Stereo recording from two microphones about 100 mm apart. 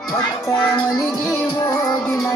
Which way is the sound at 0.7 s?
45° left (ahead or behind).